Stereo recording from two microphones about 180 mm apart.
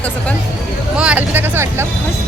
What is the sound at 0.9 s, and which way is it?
Speech, 5° right (ahead or behind).